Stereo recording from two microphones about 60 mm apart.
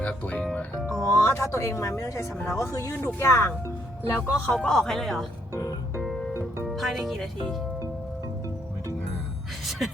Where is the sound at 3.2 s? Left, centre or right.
Left.